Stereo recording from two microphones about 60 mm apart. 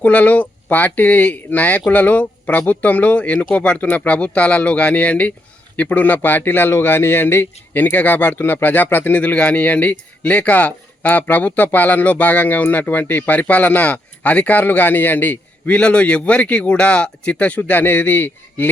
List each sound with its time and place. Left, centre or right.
0.0 s speech: left